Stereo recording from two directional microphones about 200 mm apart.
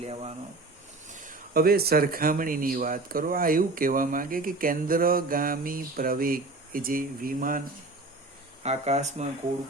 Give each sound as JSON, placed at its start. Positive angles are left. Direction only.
{"t": 0.0, "sound": "speech", "side_deg": -30}
{"t": 1.1, "sound": "speech", "side_deg": -40}
{"t": 8.6, "sound": "speech", "side_deg": -35}